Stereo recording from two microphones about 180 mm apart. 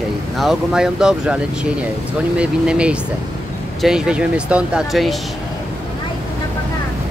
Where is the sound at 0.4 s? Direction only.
Centre (ahead or behind).